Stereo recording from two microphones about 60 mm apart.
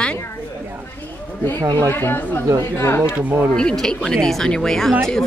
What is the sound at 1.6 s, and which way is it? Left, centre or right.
Speech, right.